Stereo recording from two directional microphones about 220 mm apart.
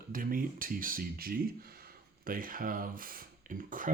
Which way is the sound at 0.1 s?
40° right (ahead or behind).